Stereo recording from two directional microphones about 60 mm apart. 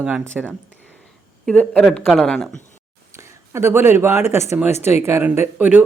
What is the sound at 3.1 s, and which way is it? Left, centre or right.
Speech, right.